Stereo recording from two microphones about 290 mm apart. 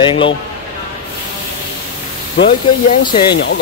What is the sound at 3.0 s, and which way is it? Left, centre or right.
Speech, centre.